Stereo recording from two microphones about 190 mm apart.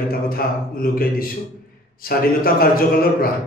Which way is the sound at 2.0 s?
50° left (ahead or behind).